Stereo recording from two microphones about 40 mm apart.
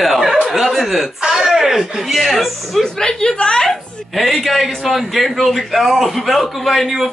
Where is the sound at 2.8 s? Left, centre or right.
Centre.